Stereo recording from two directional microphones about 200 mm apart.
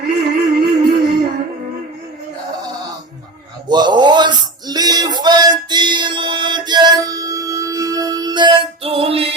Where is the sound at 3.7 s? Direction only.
20° right (ahead or behind).